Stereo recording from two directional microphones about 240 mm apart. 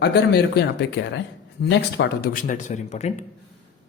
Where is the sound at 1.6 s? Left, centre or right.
Left.